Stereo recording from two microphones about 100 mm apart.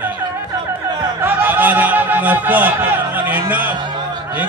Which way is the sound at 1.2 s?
20° right (ahead or behind).